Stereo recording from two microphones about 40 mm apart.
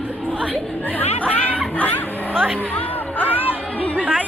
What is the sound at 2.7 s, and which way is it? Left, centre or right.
Speech, left.